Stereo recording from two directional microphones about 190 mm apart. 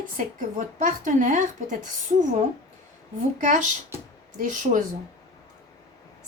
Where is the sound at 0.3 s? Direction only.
45° right (ahead or behind).